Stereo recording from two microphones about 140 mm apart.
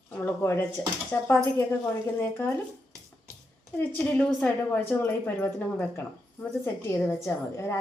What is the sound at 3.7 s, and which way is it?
A woman's voice, 15° left (ahead or behind).